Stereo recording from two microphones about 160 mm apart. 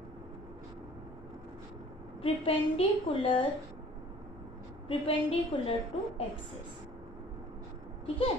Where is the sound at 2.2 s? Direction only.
35° left (ahead or behind).